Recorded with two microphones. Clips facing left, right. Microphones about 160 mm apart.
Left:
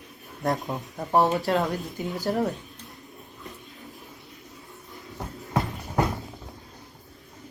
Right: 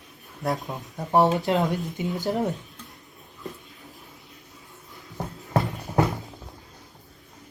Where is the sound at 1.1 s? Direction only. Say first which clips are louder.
Right 1 dB; 20° right (ahead or behind).